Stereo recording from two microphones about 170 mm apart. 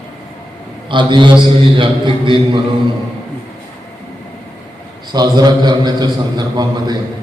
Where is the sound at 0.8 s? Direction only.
30° right (ahead or behind).